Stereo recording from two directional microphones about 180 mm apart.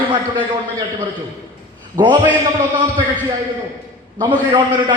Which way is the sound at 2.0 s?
20° right (ahead or behind).